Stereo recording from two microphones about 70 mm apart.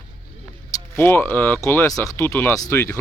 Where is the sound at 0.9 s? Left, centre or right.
Left.